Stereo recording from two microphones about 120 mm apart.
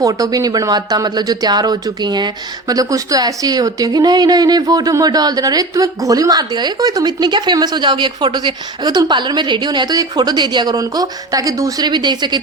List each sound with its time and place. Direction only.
0.0 s speech: 30° right (ahead or behind)